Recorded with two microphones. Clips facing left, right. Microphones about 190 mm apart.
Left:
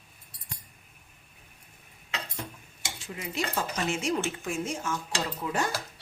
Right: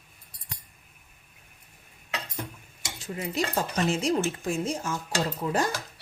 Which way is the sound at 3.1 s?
35° right (ahead or behind).